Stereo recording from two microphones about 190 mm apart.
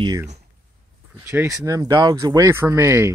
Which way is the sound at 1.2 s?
15° right (ahead or behind).